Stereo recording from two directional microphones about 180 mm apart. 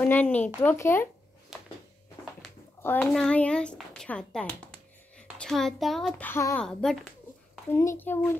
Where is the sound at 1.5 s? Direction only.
Centre (ahead or behind).